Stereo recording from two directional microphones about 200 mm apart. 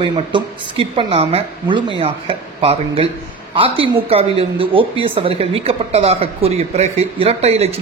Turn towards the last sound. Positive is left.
turn(degrees=-30)  # may be behind; listen again after turning